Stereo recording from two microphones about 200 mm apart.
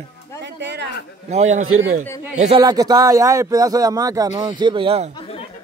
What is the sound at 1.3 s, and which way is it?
Speech, 35° right (ahead or behind).